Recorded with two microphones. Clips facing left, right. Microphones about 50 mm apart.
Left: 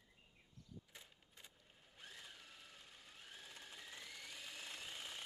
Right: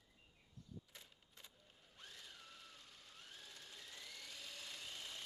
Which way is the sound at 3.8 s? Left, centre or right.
Centre.